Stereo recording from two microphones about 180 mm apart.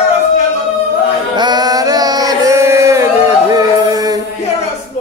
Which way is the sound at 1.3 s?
25° right (ahead or behind).